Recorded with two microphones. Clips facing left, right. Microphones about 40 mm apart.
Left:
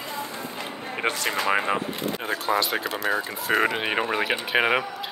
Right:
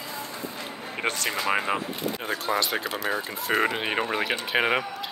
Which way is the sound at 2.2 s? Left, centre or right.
Centre.